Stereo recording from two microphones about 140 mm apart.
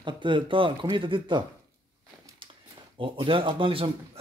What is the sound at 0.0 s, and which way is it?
A man's voice, 35° right (ahead or behind).